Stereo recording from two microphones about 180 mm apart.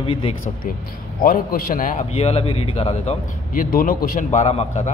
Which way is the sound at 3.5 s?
50° left (ahead or behind).